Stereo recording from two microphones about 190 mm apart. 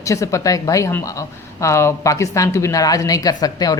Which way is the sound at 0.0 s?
15° left (ahead or behind).